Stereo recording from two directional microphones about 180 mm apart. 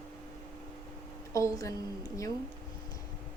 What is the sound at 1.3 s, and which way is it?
Speech, 20° left (ahead or behind).